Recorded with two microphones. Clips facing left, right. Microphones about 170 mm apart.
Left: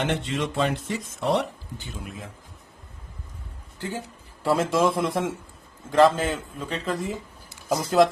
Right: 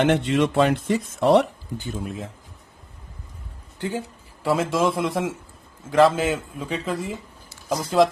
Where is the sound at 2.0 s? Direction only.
25° right (ahead or behind).